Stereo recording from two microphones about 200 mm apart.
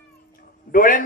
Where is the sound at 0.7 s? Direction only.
45° left (ahead or behind).